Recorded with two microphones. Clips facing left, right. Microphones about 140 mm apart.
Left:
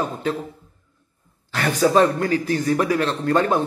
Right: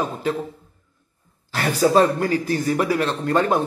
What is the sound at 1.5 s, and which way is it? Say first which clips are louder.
Speech: even; 35° right (ahead or behind).